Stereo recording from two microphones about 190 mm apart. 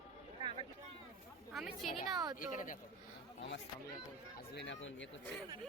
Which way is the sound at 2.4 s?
45° left (ahead or behind).